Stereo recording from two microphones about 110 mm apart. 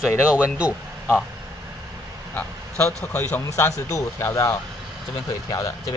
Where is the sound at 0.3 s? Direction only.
10° right (ahead or behind).